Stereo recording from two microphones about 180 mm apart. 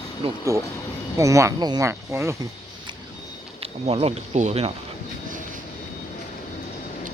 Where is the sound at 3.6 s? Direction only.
35° right (ahead or behind).